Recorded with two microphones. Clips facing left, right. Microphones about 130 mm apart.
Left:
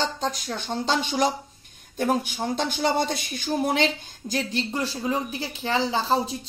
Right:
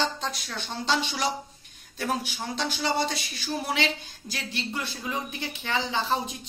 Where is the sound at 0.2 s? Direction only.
40° left (ahead or behind).